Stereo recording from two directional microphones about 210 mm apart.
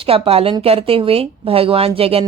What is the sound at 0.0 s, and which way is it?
Speech, 25° right (ahead or behind).